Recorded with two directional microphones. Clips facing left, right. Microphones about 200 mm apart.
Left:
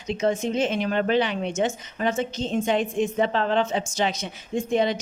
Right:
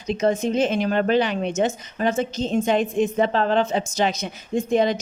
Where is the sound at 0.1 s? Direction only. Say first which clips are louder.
Right 3 dB; 40° right (ahead or behind).